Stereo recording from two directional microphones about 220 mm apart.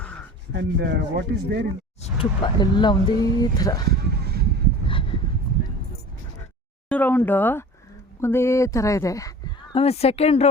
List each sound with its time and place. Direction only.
0.5 s speech: 50° right (ahead or behind)
2.0 s speech: 25° left (ahead or behind)
4.0 s a sound: 45° right (ahead or behind)
4.9 s a sound: 25° left (ahead or behind)
6.8 s speech: 5° left (ahead or behind)
9.7 s speech: 30° left (ahead or behind)